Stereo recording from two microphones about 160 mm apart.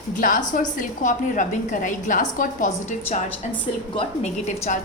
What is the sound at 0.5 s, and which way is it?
A woman's voice, 50° left (ahead or behind).